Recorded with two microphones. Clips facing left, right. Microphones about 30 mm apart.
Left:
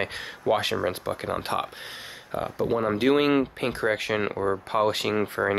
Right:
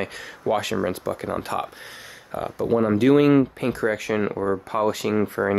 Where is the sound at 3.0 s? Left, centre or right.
Left.